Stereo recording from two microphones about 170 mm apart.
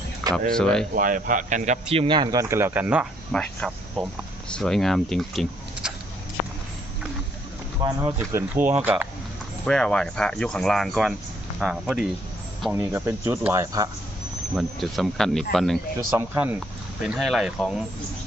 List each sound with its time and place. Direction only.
0.5 s speech: 5° left (ahead or behind)
0.9 s speech: 50° right (ahead or behind); by 3.1 s 5° right (ahead or behind)
3.3 s speech: 5° left (ahead or behind)
7.8 s speech: 20° right (ahead or behind)
9.6 s speech: 5° left (ahead or behind)
12.7 s speech: 15° right (ahead or behind)
14.5 s speech: centre (ahead or behind)
16.0 s speech: 15° right (ahead or behind)
17.0 s speech: centre (ahead or behind)